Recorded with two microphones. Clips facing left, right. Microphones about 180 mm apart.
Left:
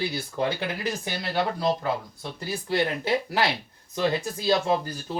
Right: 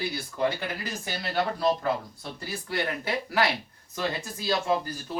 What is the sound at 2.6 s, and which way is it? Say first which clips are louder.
Speech: left 5 dB; 25° left (ahead or behind).